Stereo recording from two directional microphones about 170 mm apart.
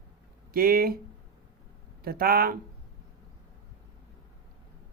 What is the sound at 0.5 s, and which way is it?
Speech, 60° right (ahead or behind).